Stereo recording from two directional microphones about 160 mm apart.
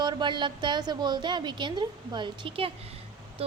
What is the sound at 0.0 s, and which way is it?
A woman's voice, 30° right (ahead or behind).